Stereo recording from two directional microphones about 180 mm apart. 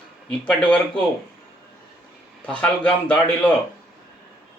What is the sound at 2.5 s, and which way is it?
A man's voice, 10° left (ahead or behind).